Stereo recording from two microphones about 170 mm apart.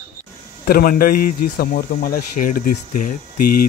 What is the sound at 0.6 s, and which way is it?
Speech, 60° left (ahead or behind).